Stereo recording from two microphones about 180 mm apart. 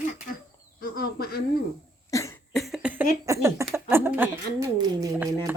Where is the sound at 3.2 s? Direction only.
15° right (ahead or behind).